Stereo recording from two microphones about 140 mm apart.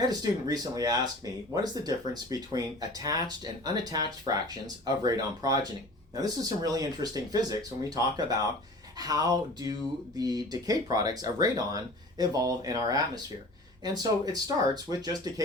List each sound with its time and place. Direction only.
0.0 s speech: 25° right (ahead or behind)
14.0 s speech: 25° right (ahead or behind)